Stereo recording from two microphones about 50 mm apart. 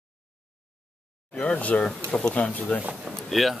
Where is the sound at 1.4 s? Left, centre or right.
Left.